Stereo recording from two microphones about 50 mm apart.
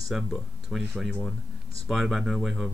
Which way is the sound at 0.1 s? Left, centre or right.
Centre.